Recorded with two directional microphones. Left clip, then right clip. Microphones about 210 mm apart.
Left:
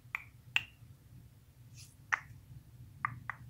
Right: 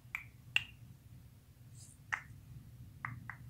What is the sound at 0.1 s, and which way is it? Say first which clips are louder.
Finger snapping: left 1 dB; 5° left (ahead or behind).